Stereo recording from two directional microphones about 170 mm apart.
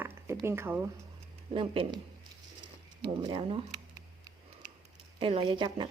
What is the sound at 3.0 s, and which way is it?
Speech, 25° right (ahead or behind).